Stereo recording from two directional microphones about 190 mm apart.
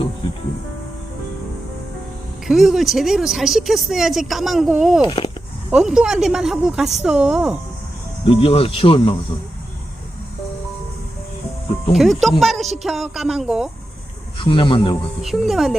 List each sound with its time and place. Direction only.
2.5 s a woman's voice: centre (ahead or behind)
5.0 s speech: 25° left (ahead or behind)
5.7 s a woman's voice: 5° right (ahead or behind)
8.2 s speech: 25° left (ahead or behind)
11.9 s a woman's voice: centre (ahead or behind)
14.3 s speech: 25° left (ahead or behind)
15.2 s a woman's voice: centre (ahead or behind)